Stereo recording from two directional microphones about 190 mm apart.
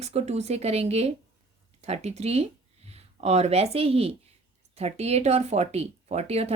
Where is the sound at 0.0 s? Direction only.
35° right (ahead or behind).